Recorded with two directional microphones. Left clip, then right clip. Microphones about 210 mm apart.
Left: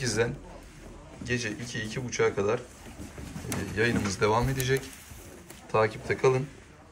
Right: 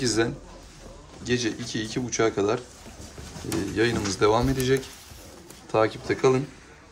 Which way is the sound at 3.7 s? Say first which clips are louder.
Right 2 dB; 10° right (ahead or behind).